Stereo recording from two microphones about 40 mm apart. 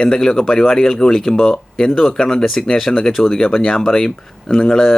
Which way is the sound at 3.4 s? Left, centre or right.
Left.